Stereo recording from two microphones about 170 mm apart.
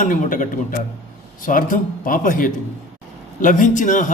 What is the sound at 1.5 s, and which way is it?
A man's voice, 55° left (ahead or behind).